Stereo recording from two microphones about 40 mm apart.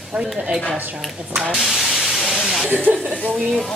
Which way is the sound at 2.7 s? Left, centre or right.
Right.